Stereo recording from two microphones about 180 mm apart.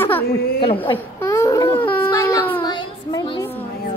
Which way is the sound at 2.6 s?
25° left (ahead or behind).